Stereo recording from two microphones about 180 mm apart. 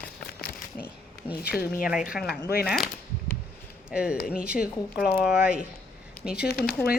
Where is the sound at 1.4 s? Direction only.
60° left (ahead or behind).